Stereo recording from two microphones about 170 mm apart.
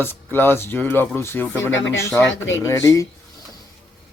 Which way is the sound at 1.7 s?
90° left.